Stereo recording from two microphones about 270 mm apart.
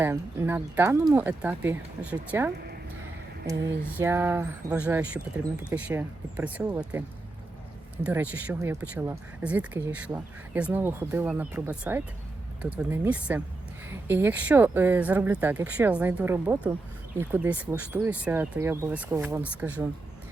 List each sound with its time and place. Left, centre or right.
0.0 s speech: centre
3.5 s speech: right
3.9 s speech: centre
8.0 s speech: centre